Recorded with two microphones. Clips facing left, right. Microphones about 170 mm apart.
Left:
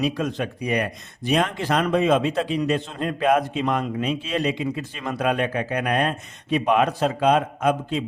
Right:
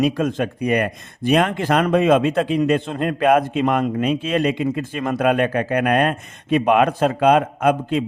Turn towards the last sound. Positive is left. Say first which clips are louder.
# right 4 dB
turn(degrees=-60)  # may be behind; listen again after turning